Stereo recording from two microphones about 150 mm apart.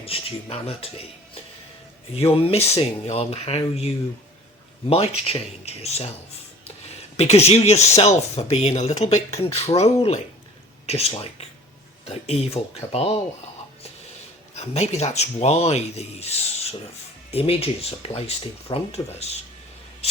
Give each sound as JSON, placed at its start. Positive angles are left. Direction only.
{"t": 0.0, "sound": "speech", "side_deg": 40}
{"t": 2.1, "sound": "speech", "side_deg": 40}
{"t": 7.2, "sound": "speech", "side_deg": 45}
{"t": 14.5, "sound": "speech", "side_deg": 50}